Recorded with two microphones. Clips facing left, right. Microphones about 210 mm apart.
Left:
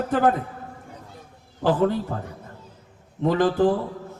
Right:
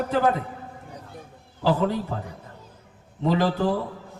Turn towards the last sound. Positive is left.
turn(degrees=50)  # may be behind; listen again after turning